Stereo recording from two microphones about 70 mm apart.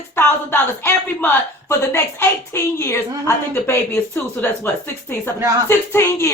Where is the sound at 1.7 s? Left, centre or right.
Left.